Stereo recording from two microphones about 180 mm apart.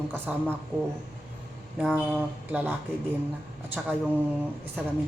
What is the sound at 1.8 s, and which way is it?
Speech, 5° right (ahead or behind).